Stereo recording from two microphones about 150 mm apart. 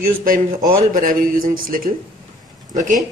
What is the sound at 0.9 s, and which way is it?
Speech, 65° right (ahead or behind).